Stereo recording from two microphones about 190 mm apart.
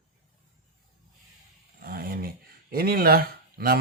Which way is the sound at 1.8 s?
50° right (ahead or behind).